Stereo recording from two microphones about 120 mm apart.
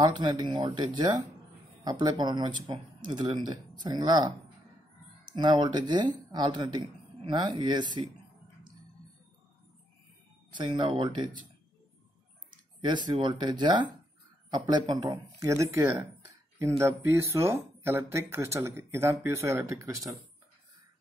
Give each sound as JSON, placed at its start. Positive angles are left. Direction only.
{"t": 0.0, "sound": "speech", "side_deg": -35}
{"t": 10.5, "sound": "speech", "side_deg": -40}
{"t": 12.8, "sound": "speech", "side_deg": -40}